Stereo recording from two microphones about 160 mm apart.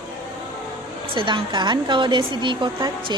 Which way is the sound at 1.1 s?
30° right (ahead or behind).